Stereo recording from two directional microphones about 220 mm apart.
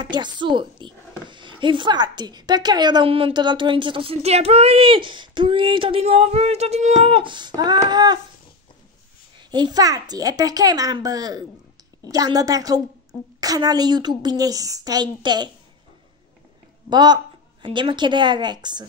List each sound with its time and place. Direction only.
0.0 s speech: 20° right (ahead or behind)
9.5 s a woman's voice: 20° right (ahead or behind)
16.9 s speech: 20° right (ahead or behind)